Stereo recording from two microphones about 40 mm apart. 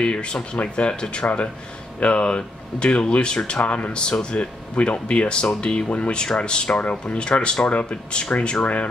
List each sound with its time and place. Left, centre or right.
0.0 s speech: left
3.6 s speech: left
6.8 s speech: left